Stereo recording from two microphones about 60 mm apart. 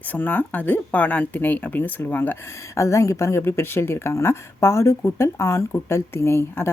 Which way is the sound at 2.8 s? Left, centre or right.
Left.